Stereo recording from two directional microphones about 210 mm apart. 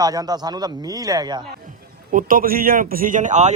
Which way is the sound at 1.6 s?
40° right (ahead or behind).